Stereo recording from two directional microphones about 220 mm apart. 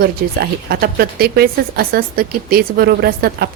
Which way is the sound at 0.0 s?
45° right (ahead or behind).